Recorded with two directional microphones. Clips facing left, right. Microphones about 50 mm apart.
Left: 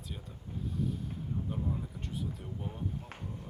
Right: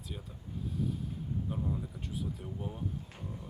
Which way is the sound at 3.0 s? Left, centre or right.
Left.